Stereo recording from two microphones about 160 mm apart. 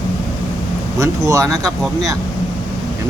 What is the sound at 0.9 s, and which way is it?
Speech, 20° right (ahead or behind).